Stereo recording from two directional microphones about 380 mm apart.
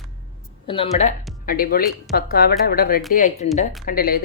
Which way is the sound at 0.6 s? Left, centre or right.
Centre.